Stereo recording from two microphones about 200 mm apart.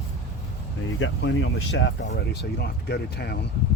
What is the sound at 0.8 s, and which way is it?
Speech, 70° left (ahead or behind).